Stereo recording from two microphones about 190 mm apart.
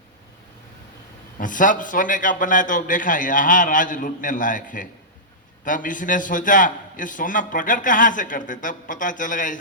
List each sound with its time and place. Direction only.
1.4 s a man's voice: 45° left (ahead or behind)